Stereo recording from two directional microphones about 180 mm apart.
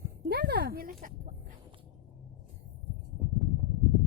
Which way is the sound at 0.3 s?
65° right (ahead or behind).